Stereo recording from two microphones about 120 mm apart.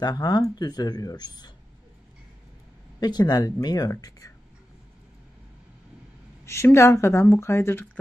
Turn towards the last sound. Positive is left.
turn(degrees=20)  # may be behind; listen again after turning